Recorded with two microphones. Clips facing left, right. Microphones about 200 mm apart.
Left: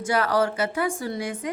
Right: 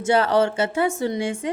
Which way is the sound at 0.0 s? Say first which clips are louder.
Right 4 dB; 25° right (ahead or behind).